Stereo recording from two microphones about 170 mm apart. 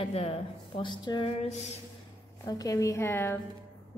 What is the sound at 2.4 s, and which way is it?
Speech, 20° left (ahead or behind).